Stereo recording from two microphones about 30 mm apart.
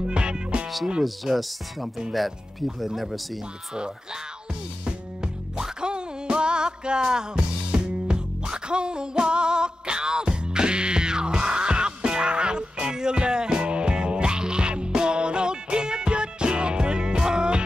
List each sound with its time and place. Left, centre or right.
0.0 s music: right
1.0 s speech: centre
3.7 s speech: right
5.8 s music: right